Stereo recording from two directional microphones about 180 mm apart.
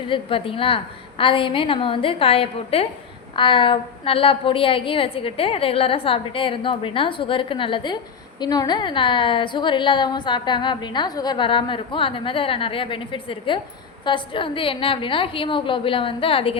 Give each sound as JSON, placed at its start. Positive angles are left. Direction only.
{"t": 0.1, "sound": "a woman's voice", "side_deg": 30}